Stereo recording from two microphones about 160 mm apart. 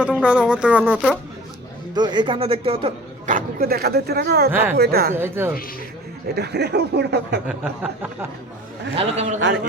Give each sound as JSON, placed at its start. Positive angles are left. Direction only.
{"t": 0.0, "sound": "speech", "side_deg": -10}
{"t": 2.0, "sound": "a man's voice", "side_deg": -30}
{"t": 3.2, "sound": "speech", "side_deg": -60}
{"t": 5.1, "sound": "speech", "side_deg": -15}
{"t": 6.3, "sound": "speech", "side_deg": -90}
{"t": 7.4, "sound": "speech", "side_deg": -10}
{"t": 9.0, "sound": "a man's voice", "side_deg": -45}